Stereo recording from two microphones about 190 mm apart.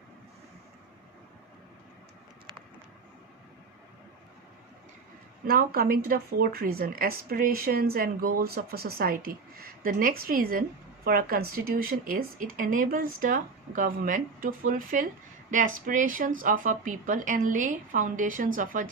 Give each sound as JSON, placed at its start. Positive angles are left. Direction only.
{"t": 5.5, "sound": "speech", "side_deg": -50}